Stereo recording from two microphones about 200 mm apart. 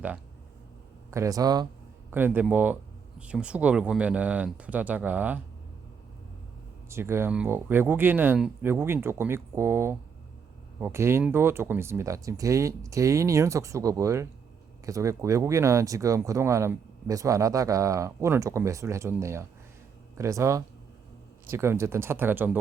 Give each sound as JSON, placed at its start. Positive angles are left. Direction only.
{"t": 1.1, "sound": "speech", "side_deg": -15}
{"t": 6.9, "sound": "speech", "side_deg": -10}